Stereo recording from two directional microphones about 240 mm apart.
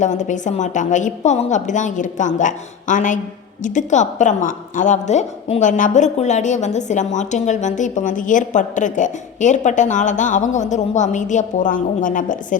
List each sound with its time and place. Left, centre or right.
0.0 s a woman's voice: left